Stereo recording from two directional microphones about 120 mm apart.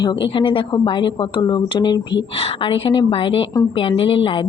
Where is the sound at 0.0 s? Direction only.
40° left (ahead or behind).